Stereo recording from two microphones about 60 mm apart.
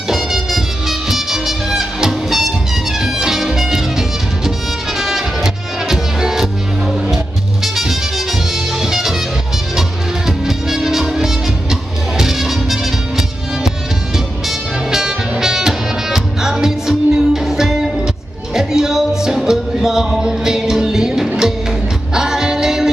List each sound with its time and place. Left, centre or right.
0.1 s music: centre
14.9 s music: centre